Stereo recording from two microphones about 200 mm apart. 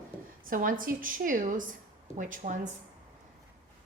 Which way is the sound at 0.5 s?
40° right (ahead or behind).